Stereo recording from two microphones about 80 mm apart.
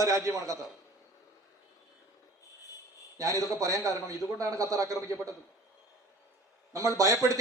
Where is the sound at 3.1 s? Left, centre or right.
Right.